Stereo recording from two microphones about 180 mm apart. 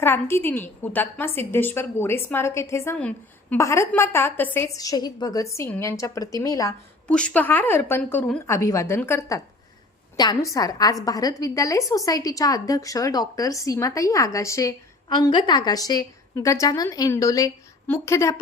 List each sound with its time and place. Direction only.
0.0 s a woman's voice: 15° left (ahead or behind)
7.1 s a woman's voice: 5° left (ahead or behind)